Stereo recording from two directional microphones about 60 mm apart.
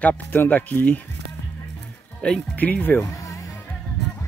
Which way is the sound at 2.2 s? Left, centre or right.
Centre.